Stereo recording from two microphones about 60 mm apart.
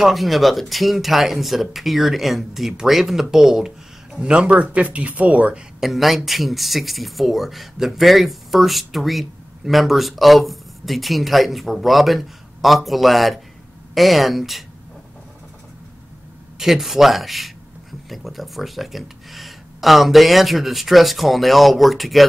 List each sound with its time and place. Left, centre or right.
0.0 s speech: centre
4.2 s speech: centre
5.8 s speech: centre
16.5 s speech: centre